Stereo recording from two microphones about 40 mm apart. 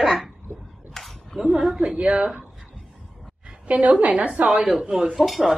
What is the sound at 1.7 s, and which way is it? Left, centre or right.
Speech, right.